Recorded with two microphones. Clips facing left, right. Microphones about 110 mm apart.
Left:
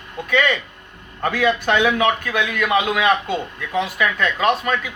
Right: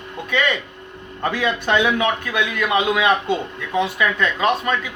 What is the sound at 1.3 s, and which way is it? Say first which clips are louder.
A man's voice: left 2 dB; 25° right (ahead or behind).